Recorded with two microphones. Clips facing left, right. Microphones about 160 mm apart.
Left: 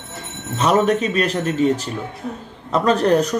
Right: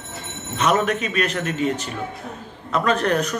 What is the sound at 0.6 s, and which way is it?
Speech, 30° left (ahead or behind).